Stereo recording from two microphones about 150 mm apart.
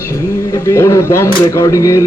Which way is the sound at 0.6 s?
20° left (ahead or behind).